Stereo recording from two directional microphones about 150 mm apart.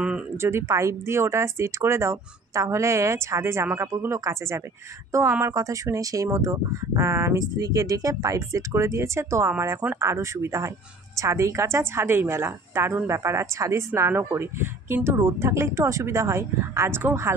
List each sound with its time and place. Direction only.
0.4 s a woman's voice: 15° right (ahead or behind)